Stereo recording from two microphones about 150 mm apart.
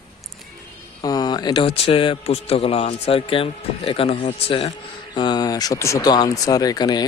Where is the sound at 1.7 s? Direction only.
40° left (ahead or behind).